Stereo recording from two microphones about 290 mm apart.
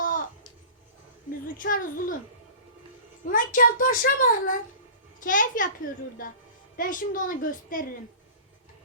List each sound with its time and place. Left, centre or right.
1.5 s a child's voice: left
3.2 s a child's voice: left